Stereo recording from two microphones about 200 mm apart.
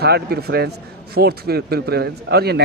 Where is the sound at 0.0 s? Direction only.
50° right (ahead or behind).